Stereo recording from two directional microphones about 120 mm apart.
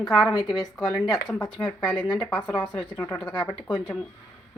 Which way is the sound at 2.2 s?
10° left (ahead or behind).